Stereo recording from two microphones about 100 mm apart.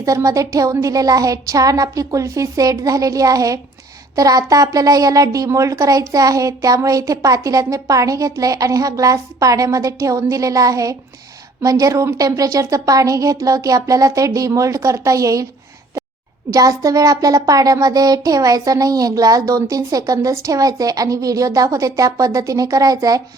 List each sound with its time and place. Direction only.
0.0 s a woman's voice: 35° right (ahead or behind)
16.5 s a woman's voice: 35° right (ahead or behind)